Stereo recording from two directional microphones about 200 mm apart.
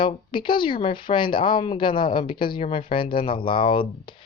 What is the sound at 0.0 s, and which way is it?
Speech, 25° left (ahead or behind).